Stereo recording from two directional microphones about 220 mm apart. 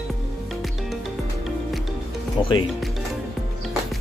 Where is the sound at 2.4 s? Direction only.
20° left (ahead or behind).